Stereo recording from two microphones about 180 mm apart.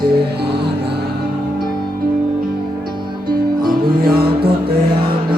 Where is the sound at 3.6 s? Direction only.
55° right (ahead or behind).